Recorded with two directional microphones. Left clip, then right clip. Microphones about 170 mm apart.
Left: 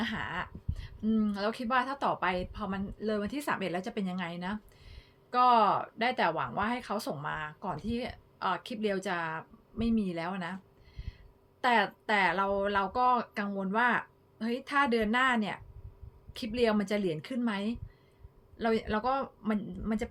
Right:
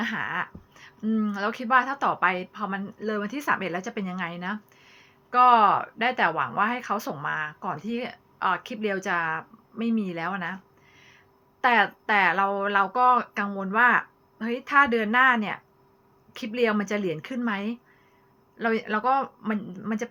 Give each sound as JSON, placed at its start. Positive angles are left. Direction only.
{"t": 0.0, "sound": "speech", "side_deg": 35}
{"t": 11.6, "sound": "speech", "side_deg": 30}